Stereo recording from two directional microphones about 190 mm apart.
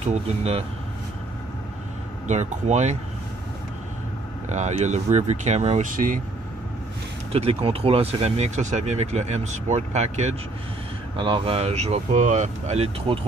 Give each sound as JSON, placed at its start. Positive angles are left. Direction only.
{"t": 0.0, "sound": "speech", "side_deg": -35}
{"t": 2.2, "sound": "speech", "side_deg": -40}
{"t": 4.5, "sound": "speech", "side_deg": -40}
{"t": 7.3, "sound": "speech", "side_deg": -30}